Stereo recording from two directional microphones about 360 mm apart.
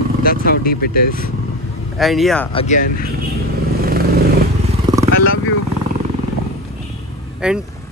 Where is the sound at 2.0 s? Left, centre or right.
Centre.